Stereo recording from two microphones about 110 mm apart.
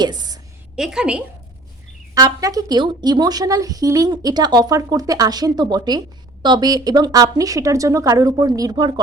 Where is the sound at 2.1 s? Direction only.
30° right (ahead or behind).